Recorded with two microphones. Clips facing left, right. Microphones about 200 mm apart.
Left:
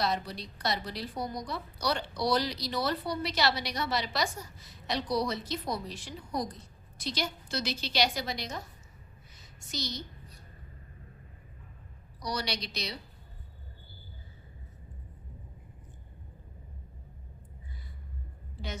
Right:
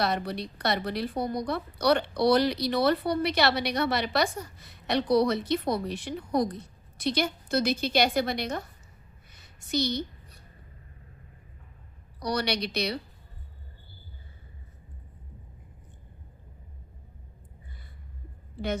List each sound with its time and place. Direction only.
0.0 s a woman's voice: 60° right (ahead or behind)
9.3 s a sound: 60° right (ahead or behind)
12.2 s a woman's voice: 60° right (ahead or behind)